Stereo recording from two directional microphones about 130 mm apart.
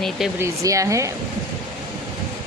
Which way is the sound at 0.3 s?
25° right (ahead or behind).